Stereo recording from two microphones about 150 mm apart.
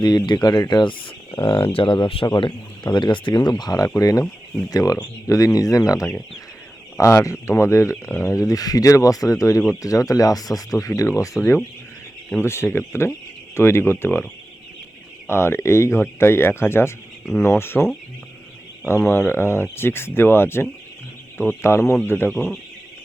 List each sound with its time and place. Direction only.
0.0 s speech: 25° left (ahead or behind)
12.4 s speech: 15° left (ahead or behind)
15.3 s speech: 15° left (ahead or behind)